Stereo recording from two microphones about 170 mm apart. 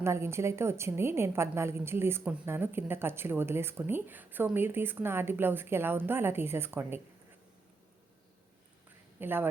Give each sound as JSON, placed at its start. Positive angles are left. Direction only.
{"t": 0.0, "sound": "speech", "side_deg": -15}
{"t": 9.2, "sound": "speech", "side_deg": -10}